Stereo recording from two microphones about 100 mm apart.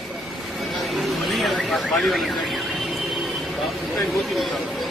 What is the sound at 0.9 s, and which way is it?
Vehicle, centre (ahead or behind).